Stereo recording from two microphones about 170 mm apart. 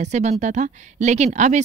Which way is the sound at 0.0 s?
40° right (ahead or behind).